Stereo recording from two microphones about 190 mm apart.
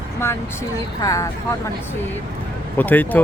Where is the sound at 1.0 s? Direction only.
15° left (ahead or behind).